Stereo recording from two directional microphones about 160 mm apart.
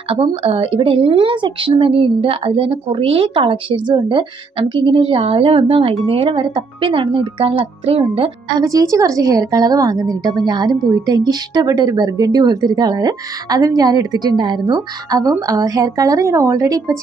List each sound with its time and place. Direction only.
0.1 s a woman's voice: 35° right (ahead or behind)